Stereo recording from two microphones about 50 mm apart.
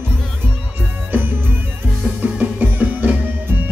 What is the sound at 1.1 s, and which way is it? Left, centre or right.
Music, right.